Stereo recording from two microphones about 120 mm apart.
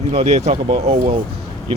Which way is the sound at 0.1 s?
55° right (ahead or behind).